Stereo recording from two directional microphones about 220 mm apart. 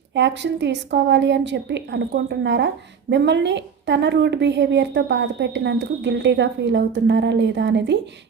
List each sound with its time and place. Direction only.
0.1 s a woman's voice: 55° right (ahead or behind)